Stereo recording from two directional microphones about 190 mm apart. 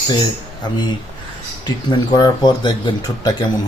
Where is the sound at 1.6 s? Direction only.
20° left (ahead or behind).